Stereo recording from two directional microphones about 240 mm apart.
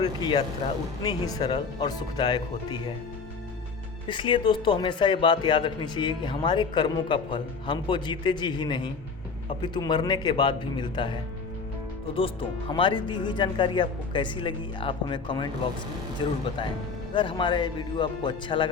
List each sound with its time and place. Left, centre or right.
0.0 s speech: centre
4.1 s speech: centre
17.2 s speech: centre